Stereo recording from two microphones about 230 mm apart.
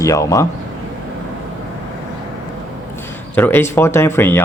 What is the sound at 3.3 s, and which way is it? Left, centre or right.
Speech, centre.